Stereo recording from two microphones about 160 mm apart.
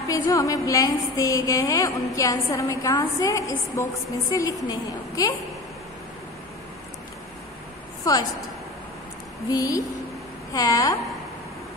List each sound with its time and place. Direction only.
0.1 s a woman's voice: 20° left (ahead or behind)
8.0 s a woman's voice: 25° left (ahead or behind)
9.5 s a woman's voice: 20° left (ahead or behind)